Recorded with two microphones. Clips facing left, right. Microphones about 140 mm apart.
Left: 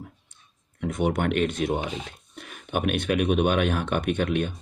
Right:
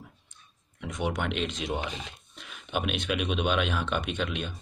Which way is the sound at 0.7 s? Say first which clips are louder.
Left 6 dB; 55° left (ahead or behind).